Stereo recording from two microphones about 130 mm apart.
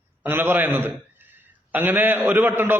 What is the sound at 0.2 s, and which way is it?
A man's voice, 15° right (ahead or behind).